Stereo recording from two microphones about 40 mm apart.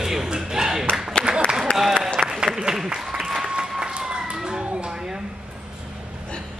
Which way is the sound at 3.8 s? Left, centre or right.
Centre.